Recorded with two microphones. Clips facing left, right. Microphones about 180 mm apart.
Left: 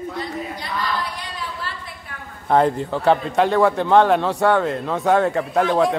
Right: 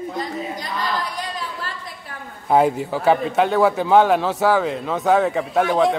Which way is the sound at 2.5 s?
5° right (ahead or behind).